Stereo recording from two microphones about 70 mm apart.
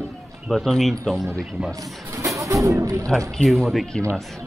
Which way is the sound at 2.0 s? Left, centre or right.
Right.